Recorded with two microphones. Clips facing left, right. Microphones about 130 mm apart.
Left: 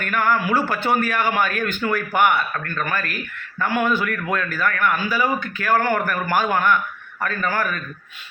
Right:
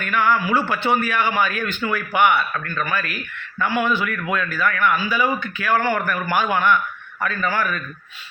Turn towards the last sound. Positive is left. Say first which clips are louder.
# even
turn(degrees=45)  # may be behind; listen again after turning